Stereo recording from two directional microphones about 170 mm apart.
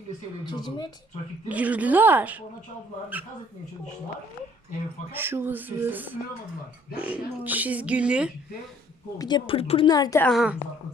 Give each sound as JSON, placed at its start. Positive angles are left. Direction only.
{"t": 0.4, "sound": "speech", "side_deg": 25}
{"t": 1.5, "sound": "speech", "side_deg": -10}
{"t": 5.1, "sound": "speech", "side_deg": -10}
{"t": 9.1, "sound": "speech", "side_deg": 25}
{"t": 10.2, "sound": "a woman's voice", "side_deg": -5}